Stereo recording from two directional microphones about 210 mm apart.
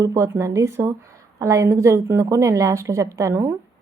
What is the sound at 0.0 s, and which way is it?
A woman's voice, 15° right (ahead or behind).